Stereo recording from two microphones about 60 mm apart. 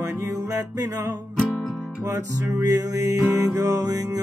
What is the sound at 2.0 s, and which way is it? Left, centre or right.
Music, right.